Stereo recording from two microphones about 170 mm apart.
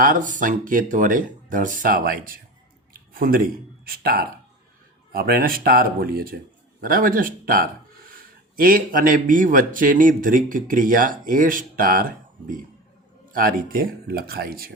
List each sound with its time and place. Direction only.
0.0 s a man's voice: 50° right (ahead or behind)